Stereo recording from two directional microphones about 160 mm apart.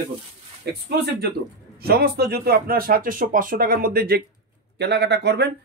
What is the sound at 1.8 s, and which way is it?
Speech, 75° right (ahead or behind).